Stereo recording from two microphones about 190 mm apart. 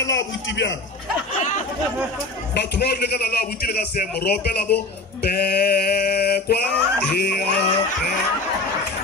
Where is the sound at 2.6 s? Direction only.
60° left (ahead or behind).